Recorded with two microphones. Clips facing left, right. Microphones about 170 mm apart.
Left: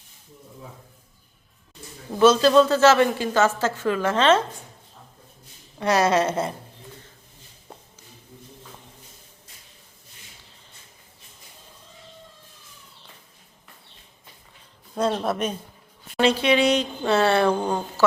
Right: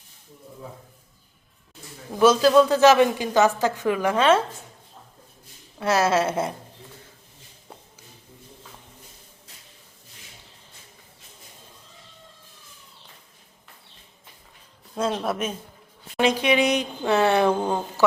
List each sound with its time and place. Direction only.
2.1 s a woman's voice: 10° right (ahead or behind)
5.8 s a woman's voice: 5° right (ahead or behind)
14.9 s a woman's voice: 10° right (ahead or behind)
17.6 s a woman's voice: 5° right (ahead or behind)